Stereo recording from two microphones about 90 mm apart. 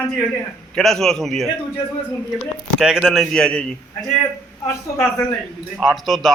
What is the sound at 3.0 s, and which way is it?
Speech, 5° left (ahead or behind).